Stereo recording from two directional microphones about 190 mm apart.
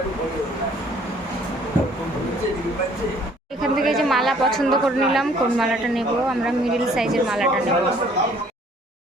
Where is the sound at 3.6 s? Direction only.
Centre (ahead or behind).